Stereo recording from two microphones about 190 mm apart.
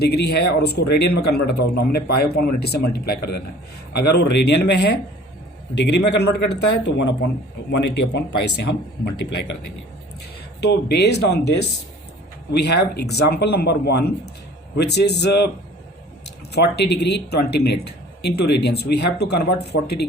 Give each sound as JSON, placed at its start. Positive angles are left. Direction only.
{"t": 0.0, "sound": "speech", "side_deg": 60}
{"t": 10.6, "sound": "speech", "side_deg": 60}
{"t": 16.5, "sound": "speech", "side_deg": 60}